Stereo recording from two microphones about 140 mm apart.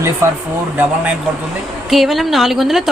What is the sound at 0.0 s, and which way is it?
Speech, 20° right (ahead or behind).